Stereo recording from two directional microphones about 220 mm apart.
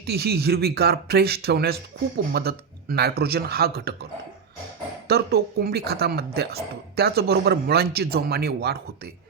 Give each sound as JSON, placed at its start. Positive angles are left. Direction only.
{"t": 0.0, "sound": "speech", "side_deg": -45}
{"t": 5.0, "sound": "speech", "side_deg": -45}